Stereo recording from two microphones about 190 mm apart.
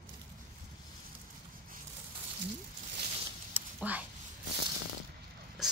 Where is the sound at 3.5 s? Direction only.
10° right (ahead or behind).